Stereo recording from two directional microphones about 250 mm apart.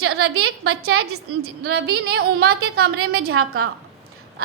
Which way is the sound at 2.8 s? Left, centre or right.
Right.